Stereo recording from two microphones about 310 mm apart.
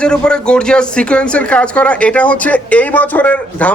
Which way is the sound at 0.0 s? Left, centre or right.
Centre.